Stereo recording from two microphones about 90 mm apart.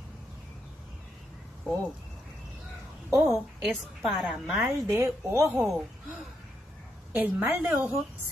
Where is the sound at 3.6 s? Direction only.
Centre (ahead or behind).